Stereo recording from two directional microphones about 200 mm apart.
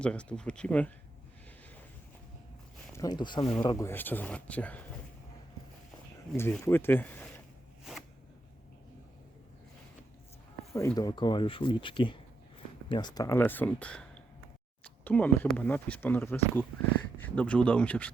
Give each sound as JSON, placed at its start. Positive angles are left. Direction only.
{"t": 0.0, "sound": "speech", "side_deg": 5}
{"t": 2.9, "sound": "speech", "side_deg": 20}
{"t": 6.3, "sound": "speech", "side_deg": 10}
{"t": 10.8, "sound": "speech", "side_deg": 15}